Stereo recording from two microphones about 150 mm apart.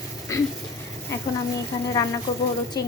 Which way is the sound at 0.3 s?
20° left (ahead or behind).